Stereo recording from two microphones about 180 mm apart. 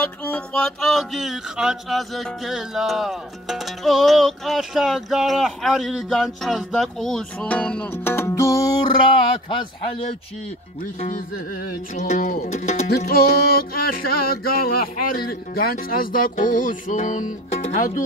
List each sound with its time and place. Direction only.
0.2 s music: 5° left (ahead or behind)
11.0 s music: 40° left (ahead or behind)
11.9 s speech: 45° left (ahead or behind)
12.8 s music: 60° left (ahead or behind)
13.7 s speech: 55° left (ahead or behind)